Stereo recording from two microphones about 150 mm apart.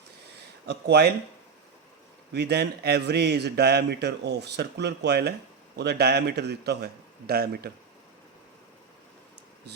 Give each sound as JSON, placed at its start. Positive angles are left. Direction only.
{"t": 0.7, "sound": "a man's voice", "side_deg": -90}
{"t": 2.3, "sound": "a man's voice", "side_deg": -90}